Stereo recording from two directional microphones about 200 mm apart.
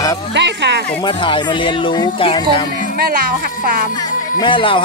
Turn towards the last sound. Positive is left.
turn(degrees=25)  # may be behind; listen again after turning